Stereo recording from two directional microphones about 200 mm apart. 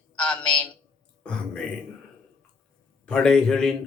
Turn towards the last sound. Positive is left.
turn(degrees=5)  # may be behind; listen again after turning